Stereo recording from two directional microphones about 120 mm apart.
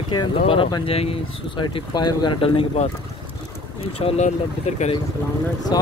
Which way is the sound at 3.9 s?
65° left (ahead or behind).